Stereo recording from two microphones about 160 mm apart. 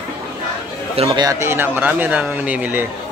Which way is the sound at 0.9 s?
35° right (ahead or behind).